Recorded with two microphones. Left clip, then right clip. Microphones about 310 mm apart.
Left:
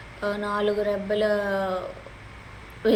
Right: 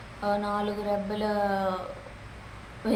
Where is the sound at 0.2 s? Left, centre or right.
Centre.